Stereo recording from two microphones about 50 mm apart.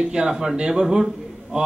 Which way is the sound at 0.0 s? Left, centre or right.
Centre.